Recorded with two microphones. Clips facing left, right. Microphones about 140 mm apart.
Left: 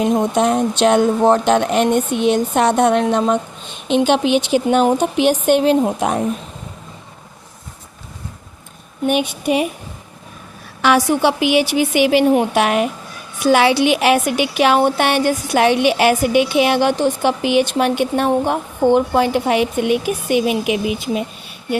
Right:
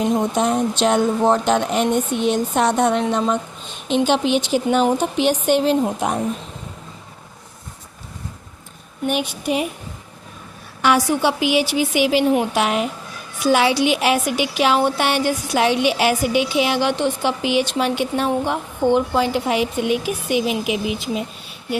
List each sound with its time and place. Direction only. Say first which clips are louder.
0.3 s a woman's voice: left 3 dB; 70° left (ahead or behind)
9.0 s a woman's voice: left 4 dB; 65° left (ahead or behind)
10.8 s a woman's voice: left 3 dB; 65° left (ahead or behind)